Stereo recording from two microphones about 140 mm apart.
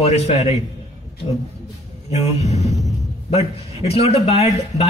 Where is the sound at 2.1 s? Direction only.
50° left (ahead or behind).